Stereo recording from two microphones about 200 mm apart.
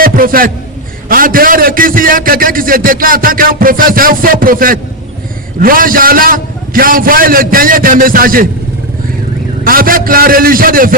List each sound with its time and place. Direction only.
0.0 s a man's voice: 45° right (ahead or behind)
9.6 s a man's voice: 45° right (ahead or behind)